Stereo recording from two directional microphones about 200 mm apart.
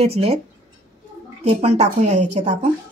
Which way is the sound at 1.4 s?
35° right (ahead or behind).